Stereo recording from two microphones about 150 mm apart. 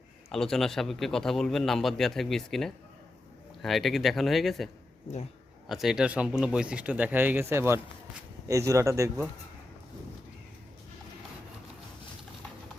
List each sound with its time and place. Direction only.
0.3 s a man's voice: 5° left (ahead or behind); by 9.2 s 20° right (ahead or behind)